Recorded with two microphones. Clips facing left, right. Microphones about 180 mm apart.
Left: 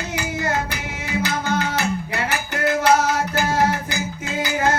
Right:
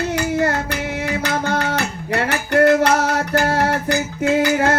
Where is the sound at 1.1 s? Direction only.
60° right (ahead or behind).